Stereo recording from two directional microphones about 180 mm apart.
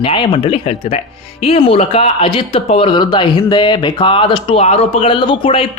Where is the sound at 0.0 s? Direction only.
30° left (ahead or behind).